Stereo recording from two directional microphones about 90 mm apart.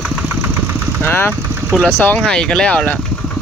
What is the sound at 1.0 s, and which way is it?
Speech, 20° left (ahead or behind).